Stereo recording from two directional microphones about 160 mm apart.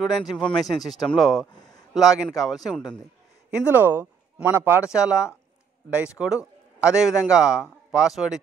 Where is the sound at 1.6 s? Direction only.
25° left (ahead or behind).